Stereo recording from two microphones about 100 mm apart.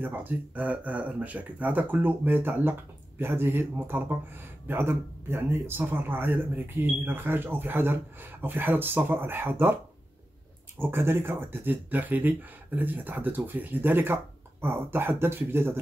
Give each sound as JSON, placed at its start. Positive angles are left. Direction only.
{"t": 0.0, "sound": "a man's voice", "side_deg": -20}
{"t": 10.8, "sound": "a man's voice", "side_deg": -25}